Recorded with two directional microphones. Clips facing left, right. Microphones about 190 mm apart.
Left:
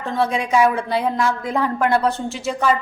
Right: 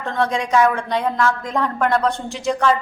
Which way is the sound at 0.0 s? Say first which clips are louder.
Even; 5° left (ahead or behind).